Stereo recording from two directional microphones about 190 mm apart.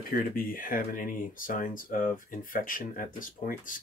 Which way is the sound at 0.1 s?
50° left (ahead or behind).